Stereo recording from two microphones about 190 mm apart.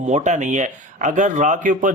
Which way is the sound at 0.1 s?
40° right (ahead or behind).